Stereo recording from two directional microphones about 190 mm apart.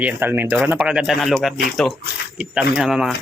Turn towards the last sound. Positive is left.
turn(degrees=0)  # may be behind; listen again after turning